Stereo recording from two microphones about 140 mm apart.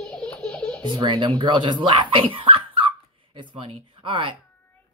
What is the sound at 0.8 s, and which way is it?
Speech, 35° right (ahead or behind).